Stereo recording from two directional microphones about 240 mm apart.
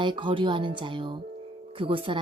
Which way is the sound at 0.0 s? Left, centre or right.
Centre.